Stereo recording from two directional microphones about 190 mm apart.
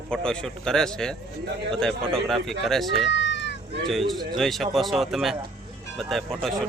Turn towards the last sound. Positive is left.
turn(degrees=0)  # may be behind; listen again after turning